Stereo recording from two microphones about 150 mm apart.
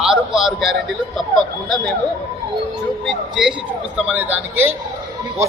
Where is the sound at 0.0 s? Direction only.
5° right (ahead or behind).